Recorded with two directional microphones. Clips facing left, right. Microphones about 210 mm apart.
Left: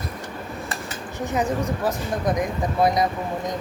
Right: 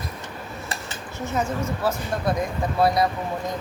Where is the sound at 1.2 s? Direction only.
15° left (ahead or behind).